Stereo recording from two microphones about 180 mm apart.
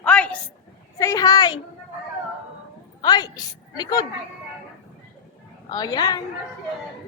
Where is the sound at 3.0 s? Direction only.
20° left (ahead or behind).